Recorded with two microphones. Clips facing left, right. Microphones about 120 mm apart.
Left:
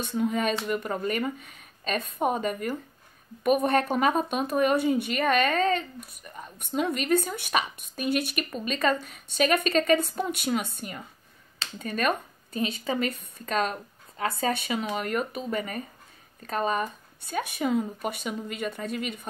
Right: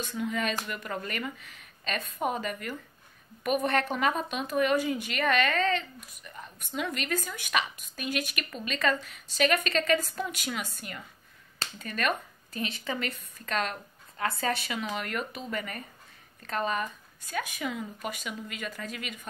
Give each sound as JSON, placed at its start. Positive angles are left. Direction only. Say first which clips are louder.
{"t": 0.1, "sound": "speech", "louder": "left 6 dB", "side_deg": 35}
{"t": 11.8, "sound": "speech", "louder": "left 4 dB", "side_deg": 30}
{"t": 15.0, "sound": "speech", "louder": "left 5 dB", "side_deg": 35}
{"t": 15.3, "sound": "speech", "louder": "left 5 dB", "side_deg": 25}